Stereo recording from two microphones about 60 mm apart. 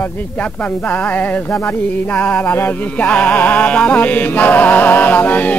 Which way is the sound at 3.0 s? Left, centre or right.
Left.